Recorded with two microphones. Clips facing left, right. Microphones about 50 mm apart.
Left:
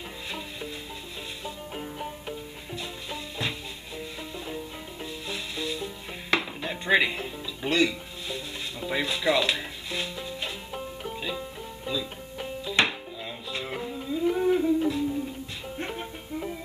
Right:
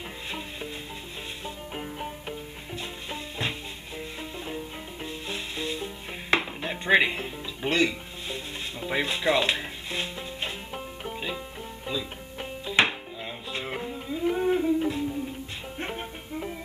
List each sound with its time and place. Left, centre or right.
1.4 s music: centre